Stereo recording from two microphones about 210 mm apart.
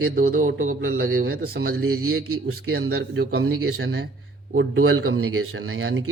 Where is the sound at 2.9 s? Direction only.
50° right (ahead or behind).